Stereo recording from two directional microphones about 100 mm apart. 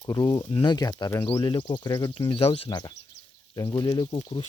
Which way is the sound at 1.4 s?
55° left (ahead or behind).